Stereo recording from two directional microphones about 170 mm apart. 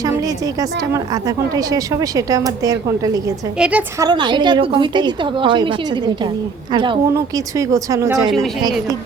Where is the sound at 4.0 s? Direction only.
25° right (ahead or behind).